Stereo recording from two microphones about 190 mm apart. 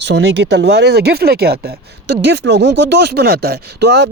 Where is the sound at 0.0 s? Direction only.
65° right (ahead or behind).